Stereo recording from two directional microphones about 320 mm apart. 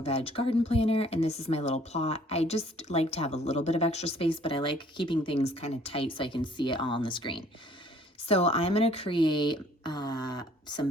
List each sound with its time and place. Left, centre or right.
0.0 s speech: centre